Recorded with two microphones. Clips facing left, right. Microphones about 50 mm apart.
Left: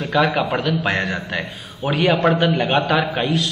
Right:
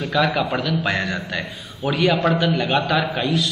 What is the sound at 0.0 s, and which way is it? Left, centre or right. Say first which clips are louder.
A man's voice: left 2 dB; centre.